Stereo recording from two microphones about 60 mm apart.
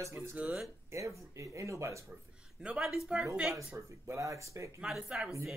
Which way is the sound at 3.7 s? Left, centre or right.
Right.